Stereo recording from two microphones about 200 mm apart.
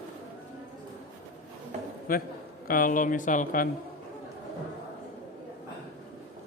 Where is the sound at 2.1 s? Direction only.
45° left (ahead or behind).